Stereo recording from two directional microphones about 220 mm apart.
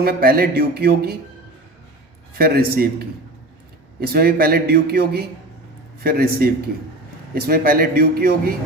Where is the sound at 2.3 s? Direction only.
45° right (ahead or behind).